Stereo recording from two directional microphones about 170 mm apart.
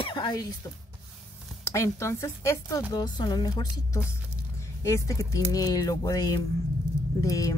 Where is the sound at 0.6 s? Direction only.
20° left (ahead or behind).